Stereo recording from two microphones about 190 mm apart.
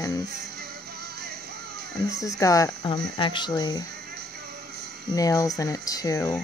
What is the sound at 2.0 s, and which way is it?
Speech, 20° left (ahead or behind).